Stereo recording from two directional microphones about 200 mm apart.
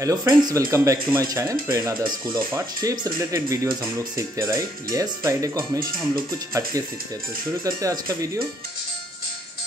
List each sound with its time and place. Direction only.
0.0 s speech: 15° right (ahead or behind)